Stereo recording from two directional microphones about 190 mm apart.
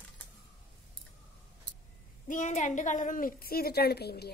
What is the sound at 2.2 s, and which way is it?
A woman's voice, 40° left (ahead or behind).